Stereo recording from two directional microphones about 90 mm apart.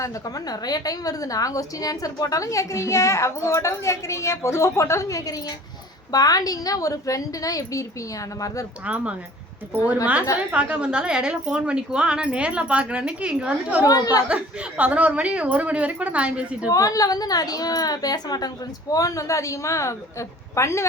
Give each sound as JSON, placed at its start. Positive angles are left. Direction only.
{"t": 0.0, "sound": "a woman's voice", "side_deg": 40}
{"t": 8.8, "sound": "a woman's voice", "side_deg": -15}
{"t": 10.3, "sound": "a woman's voice", "side_deg": -15}
{"t": 13.8, "sound": "a woman's voice", "side_deg": 40}
{"t": 14.3, "sound": "a woman's voice", "side_deg": -15}
{"t": 16.6, "sound": "a woman's voice", "side_deg": 40}